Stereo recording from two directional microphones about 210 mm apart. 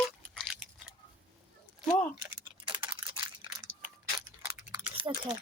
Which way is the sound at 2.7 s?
20° right (ahead or behind).